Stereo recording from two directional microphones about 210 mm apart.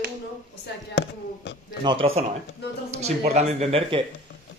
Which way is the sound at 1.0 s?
60° left (ahead or behind).